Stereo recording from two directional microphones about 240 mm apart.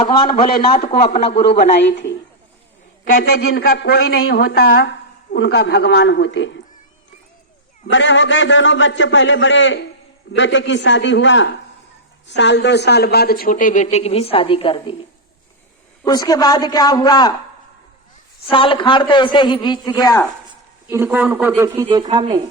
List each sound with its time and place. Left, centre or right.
0.3 s speech: left
0.7 s a man's voice: left
1.4 s a woman's voice: left
7.9 s a woman's voice: left
16.0 s a man's voice: centre
18.5 s a man's voice: left
20.8 s a woman's voice: centre